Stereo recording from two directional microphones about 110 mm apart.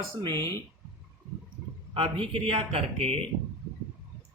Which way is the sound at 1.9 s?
55° right (ahead or behind).